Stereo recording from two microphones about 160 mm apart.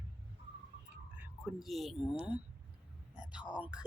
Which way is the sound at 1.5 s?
Centre (ahead or behind).